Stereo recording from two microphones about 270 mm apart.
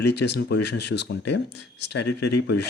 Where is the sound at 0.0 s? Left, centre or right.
Left.